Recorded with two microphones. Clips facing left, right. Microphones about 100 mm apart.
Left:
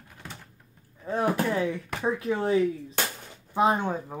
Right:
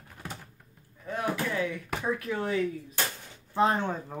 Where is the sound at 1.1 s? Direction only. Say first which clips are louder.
Left 5 dB; 30° left (ahead or behind).